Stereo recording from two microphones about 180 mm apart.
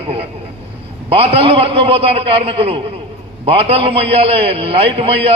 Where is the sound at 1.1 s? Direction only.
35° right (ahead or behind).